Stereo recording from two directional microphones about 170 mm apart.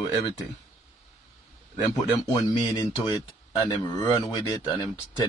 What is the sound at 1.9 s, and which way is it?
A man's voice, 20° left (ahead or behind).